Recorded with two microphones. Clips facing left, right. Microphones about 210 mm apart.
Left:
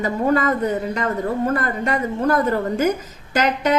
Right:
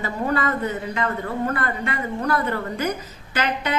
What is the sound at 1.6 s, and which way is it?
A woman's voice, 40° left (ahead or behind).